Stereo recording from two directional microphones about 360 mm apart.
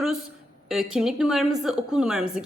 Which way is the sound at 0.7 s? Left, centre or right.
Centre.